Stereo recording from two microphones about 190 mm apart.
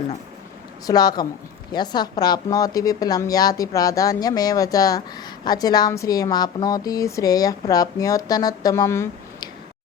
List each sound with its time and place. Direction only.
0.9 s a woman's voice: 20° left (ahead or behind)